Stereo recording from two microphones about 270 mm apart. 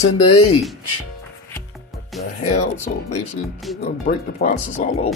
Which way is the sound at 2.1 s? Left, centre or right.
Centre.